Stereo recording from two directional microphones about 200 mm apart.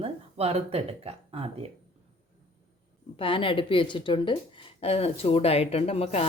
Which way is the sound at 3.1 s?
25° left (ahead or behind).